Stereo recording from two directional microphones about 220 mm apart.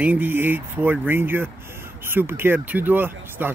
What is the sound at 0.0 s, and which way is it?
Speech, 10° right (ahead or behind).